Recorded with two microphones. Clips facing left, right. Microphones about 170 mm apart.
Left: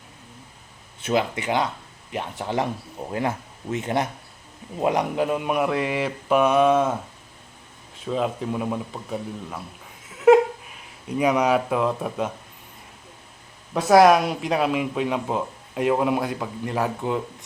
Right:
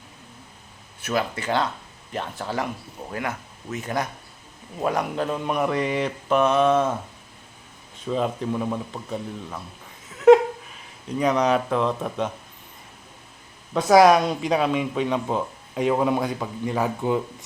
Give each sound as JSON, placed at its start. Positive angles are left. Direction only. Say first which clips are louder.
{"t": 1.0, "sound": "speech", "louder": "left 2 dB", "side_deg": 20}
{"t": 8.0, "sound": "speech", "louder": "even", "side_deg": 0}
{"t": 10.1, "sound": "a sound", "louder": "right 1 dB", "side_deg": 5}
{"t": 11.2, "sound": "speech", "louder": "left 1 dB", "side_deg": 10}
{"t": 13.7, "sound": "speech", "louder": "even", "side_deg": 5}